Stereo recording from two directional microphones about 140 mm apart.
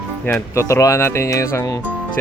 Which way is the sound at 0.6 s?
20° left (ahead or behind).